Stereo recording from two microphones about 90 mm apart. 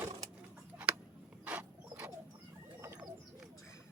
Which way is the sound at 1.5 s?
15° right (ahead or behind).